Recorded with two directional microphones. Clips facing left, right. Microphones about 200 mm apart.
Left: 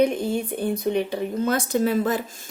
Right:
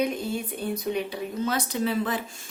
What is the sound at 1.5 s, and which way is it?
Speech, 50° left (ahead or behind).